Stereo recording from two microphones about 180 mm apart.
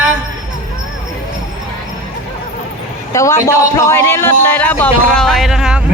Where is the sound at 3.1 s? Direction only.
15° left (ahead or behind); by 5.8 s 5° right (ahead or behind).